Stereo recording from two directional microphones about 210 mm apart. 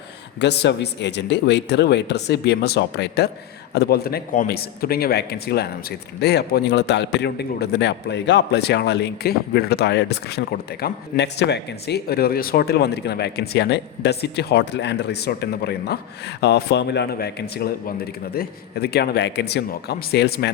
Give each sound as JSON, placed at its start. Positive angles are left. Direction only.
{"t": 0.3, "sound": "a man's voice", "side_deg": 55}